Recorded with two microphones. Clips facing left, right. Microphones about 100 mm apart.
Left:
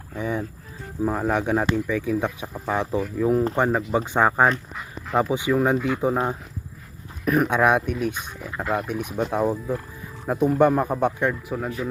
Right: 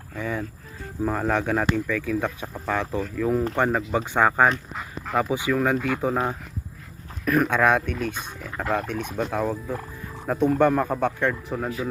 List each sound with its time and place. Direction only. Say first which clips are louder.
0.1 s a sound: left 2 dB; 15° left (ahead or behind)
1.0 s fowl: left 1 dB; 10° left (ahead or behind)
5.3 s speech: left 2 dB; 20° left (ahead or behind)
7.3 s fowl: left 1 dB; 15° left (ahead or behind)
11.5 s speech: even; centre (ahead or behind)